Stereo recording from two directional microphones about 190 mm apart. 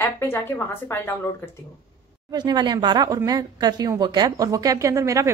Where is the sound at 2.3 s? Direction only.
20° right (ahead or behind).